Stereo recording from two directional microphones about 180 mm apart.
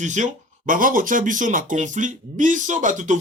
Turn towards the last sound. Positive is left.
turn(degrees=-45)  # may be behind; listen again after turning